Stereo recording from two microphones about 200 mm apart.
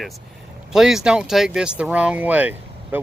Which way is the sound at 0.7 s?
Centre (ahead or behind).